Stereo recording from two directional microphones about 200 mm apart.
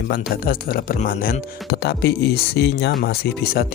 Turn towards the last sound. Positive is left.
turn(degrees=50)  # may be behind; listen again after turning